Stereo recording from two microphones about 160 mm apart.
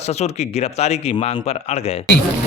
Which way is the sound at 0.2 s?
45° left (ahead or behind).